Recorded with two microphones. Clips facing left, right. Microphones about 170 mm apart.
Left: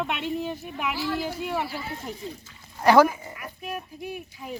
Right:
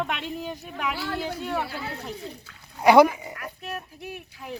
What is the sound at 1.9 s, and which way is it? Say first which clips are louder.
Speech: even; 65° right (ahead or behind).